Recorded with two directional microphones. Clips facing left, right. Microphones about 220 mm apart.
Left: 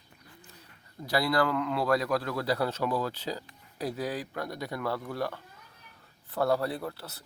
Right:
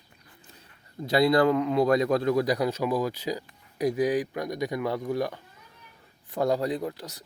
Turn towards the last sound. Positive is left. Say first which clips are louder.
# right 5 dB
turn(degrees=-15)  # may be behind; listen again after turning